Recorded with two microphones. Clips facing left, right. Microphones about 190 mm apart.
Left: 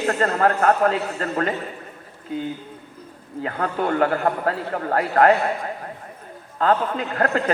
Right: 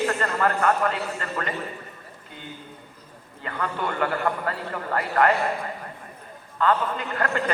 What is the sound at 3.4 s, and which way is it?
A man's voice, 45° left (ahead or behind).